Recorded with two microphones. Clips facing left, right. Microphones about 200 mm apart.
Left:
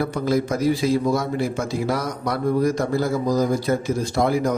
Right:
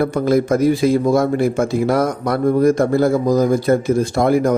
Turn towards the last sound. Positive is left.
turn(degrees=-50)  # may be behind; listen again after turning